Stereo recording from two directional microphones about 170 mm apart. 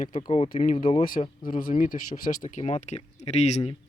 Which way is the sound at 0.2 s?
30° left (ahead or behind).